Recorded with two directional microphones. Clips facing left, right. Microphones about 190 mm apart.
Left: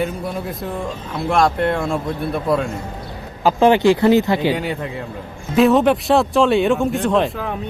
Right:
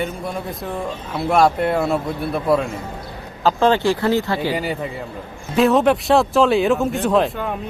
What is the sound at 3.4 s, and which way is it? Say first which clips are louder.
Speech: left 3 dB; 15° left (ahead or behind).